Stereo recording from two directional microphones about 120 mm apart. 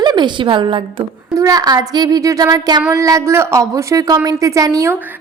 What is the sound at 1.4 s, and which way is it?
A woman's voice, 30° right (ahead or behind).